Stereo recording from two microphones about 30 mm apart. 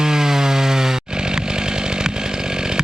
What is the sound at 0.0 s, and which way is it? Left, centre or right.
Chainsaw, centre.